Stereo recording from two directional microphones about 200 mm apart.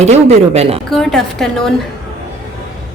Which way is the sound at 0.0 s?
35° right (ahead or behind).